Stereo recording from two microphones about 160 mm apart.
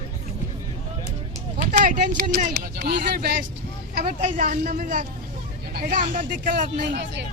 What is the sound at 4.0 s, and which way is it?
Speech, 55° right (ahead or behind).